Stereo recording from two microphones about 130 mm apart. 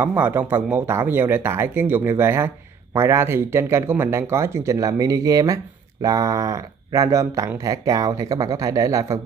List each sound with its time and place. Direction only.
0.0 s speech: 15° right (ahead or behind)